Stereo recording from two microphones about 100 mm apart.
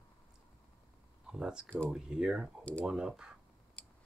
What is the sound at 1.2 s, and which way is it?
Speech, 5° right (ahead or behind).